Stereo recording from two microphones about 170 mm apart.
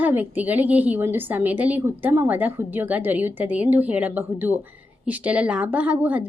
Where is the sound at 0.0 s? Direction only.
10° right (ahead or behind).